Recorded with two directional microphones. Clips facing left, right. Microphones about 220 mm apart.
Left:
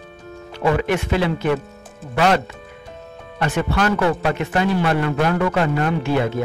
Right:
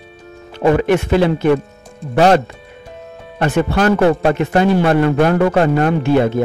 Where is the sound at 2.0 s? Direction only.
5° left (ahead or behind).